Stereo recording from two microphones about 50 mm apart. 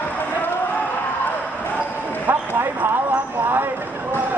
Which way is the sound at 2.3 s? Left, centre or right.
Right.